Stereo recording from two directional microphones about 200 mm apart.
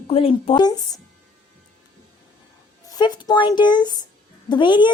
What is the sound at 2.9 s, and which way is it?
Speech, 20° left (ahead or behind).